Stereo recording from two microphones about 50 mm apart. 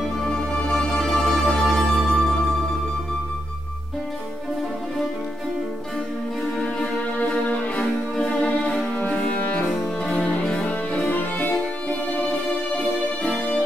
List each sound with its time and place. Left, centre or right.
0.2 s music: centre
8.3 s music: left
9.7 s music: centre
10.1 s music: left
10.4 s music: centre
11.1 s violin: left